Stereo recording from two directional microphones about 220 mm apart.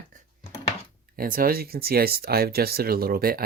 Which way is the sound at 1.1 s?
40° right (ahead or behind).